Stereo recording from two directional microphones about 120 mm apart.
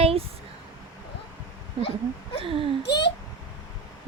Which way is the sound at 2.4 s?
50° right (ahead or behind).